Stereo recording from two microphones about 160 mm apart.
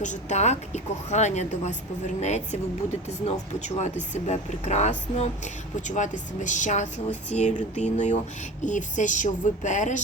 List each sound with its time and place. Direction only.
0.0 s a woman's voice: 50° left (ahead or behind)